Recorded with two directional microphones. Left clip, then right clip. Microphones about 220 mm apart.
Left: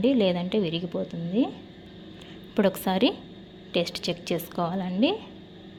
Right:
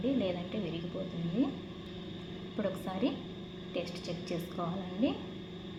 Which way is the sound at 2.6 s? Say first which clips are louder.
Left 12 dB; 45° left (ahead or behind).